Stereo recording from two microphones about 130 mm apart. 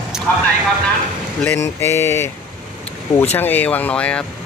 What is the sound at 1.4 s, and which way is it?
Speech, 15° left (ahead or behind).